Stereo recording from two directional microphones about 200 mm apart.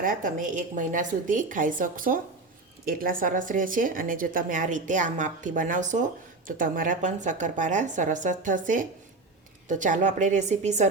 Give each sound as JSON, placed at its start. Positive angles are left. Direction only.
{"t": 0.0, "sound": "a woman's voice", "side_deg": -40}